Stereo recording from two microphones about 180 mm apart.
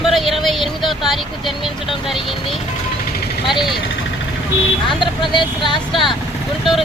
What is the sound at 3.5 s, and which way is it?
Speech, centre (ahead or behind).